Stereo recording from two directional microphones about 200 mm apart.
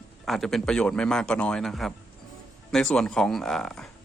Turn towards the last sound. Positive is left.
turn(degrees=0)  # may be behind; listen again after turning